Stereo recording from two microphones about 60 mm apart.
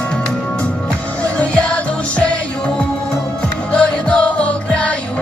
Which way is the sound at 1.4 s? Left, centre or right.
Centre.